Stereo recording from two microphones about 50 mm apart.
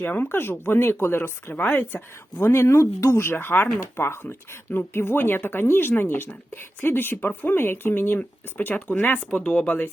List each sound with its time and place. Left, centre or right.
0.0 s speech: left
0.3 s a woman's voice: left
8.2 s speech: left
9.3 s speech: centre
9.6 s speech: left